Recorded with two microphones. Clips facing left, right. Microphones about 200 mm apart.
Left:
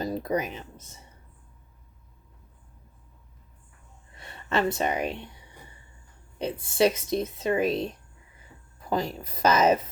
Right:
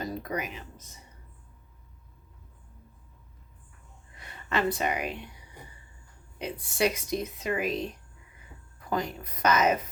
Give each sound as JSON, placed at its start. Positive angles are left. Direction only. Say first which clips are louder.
{"t": 0.0, "sound": "a sound", "louder": "left 5 dB", "side_deg": 30}
{"t": 4.2, "sound": "speech", "louder": "left 2 dB", "side_deg": 25}
{"t": 6.4, "sound": "speech", "louder": "left 5 dB", "side_deg": 25}